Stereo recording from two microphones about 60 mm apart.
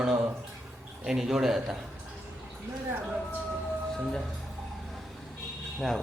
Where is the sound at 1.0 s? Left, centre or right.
Centre.